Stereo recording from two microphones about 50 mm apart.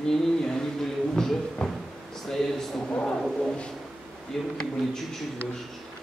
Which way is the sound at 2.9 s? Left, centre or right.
Centre.